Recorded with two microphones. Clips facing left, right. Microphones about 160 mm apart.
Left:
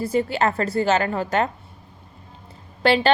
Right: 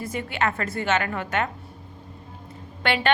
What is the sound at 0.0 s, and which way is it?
A woman's voice, 35° left (ahead or behind).